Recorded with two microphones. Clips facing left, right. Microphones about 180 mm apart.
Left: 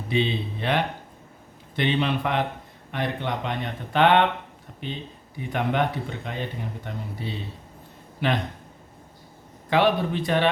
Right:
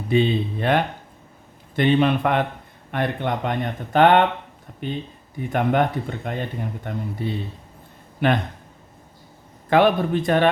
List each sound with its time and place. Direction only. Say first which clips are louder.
0.1 s speech: right 6 dB; 50° right (ahead or behind)
9.6 s speech: right 4 dB; 50° right (ahead or behind)